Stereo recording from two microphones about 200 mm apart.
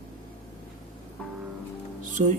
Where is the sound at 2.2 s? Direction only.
35° right (ahead or behind).